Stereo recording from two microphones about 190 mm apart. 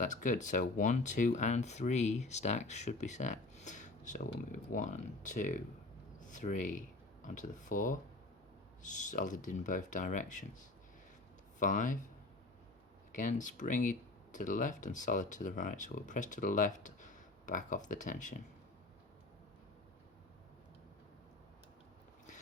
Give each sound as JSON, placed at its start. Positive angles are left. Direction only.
{"t": 0.0, "sound": "speech", "side_deg": 40}
{"t": 9.0, "sound": "speech", "side_deg": 40}
{"t": 11.6, "sound": "speech", "side_deg": 45}
{"t": 13.1, "sound": "speech", "side_deg": 40}